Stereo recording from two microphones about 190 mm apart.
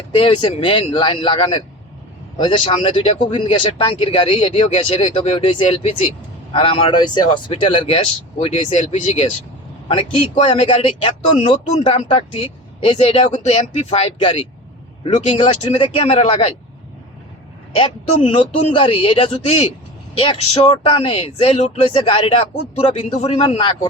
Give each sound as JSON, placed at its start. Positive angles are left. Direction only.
{"t": 0.2, "sound": "speech", "side_deg": 25}
{"t": 17.7, "sound": "speech", "side_deg": 25}